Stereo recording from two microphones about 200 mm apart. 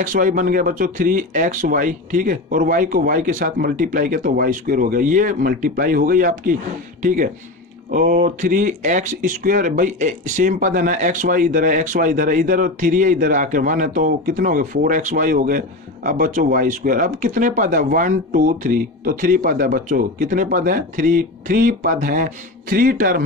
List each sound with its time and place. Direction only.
0.0 s speech: 40° right (ahead or behind)